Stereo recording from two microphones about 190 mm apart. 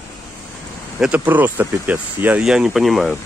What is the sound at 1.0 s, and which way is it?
Speech, 10° right (ahead or behind).